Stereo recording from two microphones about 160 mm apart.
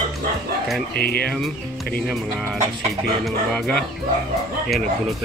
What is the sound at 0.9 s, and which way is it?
Speech, 70° left (ahead or behind).